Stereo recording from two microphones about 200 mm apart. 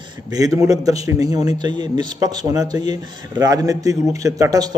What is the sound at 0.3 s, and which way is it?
A man's voice, 15° right (ahead or behind).